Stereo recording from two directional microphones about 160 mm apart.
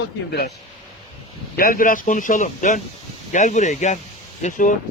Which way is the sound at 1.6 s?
65° left (ahead or behind).